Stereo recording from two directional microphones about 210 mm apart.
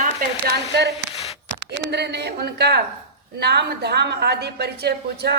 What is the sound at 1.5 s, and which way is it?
A woman's voice, 50° right (ahead or behind).